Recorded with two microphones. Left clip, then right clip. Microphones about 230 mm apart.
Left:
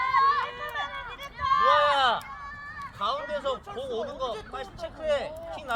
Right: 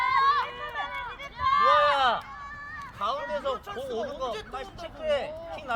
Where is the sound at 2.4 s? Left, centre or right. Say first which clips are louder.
Even; right.